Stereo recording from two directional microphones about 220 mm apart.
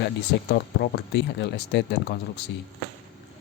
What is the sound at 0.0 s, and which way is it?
Speech, 45° left (ahead or behind).